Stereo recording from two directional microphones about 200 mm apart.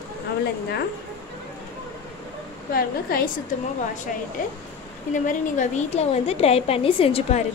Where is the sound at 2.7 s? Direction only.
45° left (ahead or behind).